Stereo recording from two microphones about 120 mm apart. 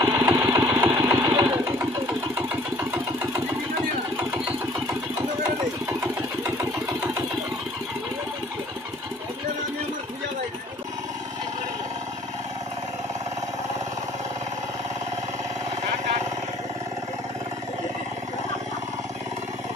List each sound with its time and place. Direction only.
0.0 s engine: 25° right (ahead or behind)